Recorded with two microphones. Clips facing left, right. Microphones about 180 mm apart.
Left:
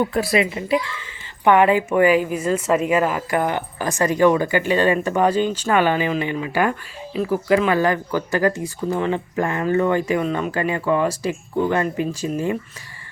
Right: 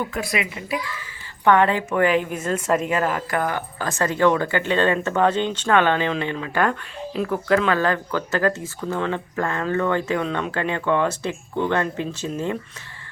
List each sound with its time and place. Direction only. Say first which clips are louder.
0.0 s a woman's voice: left 7 dB; 30° left (ahead or behind)
1.5 s a woman's voice: left 3 dB; 15° left (ahead or behind)